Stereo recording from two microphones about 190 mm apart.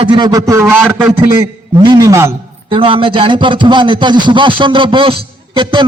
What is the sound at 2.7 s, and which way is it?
A man's voice, 25° right (ahead or behind).